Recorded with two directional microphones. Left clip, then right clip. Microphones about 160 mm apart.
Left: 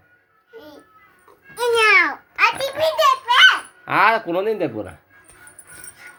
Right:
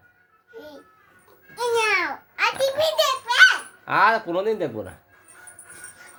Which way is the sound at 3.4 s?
Centre (ahead or behind).